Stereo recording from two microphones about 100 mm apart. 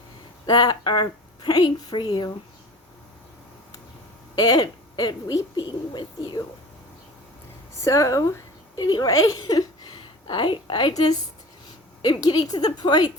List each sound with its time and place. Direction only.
0.4 s speech: 45° left (ahead or behind)
4.4 s speech: 40° left (ahead or behind)
7.9 s a woman's voice: 30° left (ahead or behind)